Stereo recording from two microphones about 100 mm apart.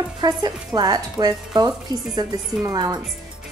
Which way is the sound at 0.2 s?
45° right (ahead or behind).